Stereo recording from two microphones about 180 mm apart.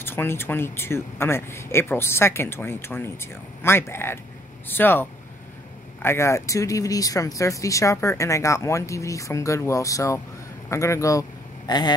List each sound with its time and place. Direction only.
0.0 s speech: 10° left (ahead or behind)
6.0 s speech: 15° left (ahead or behind)